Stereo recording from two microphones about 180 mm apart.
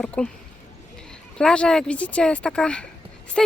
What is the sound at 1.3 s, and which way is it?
Speech, 5° left (ahead or behind).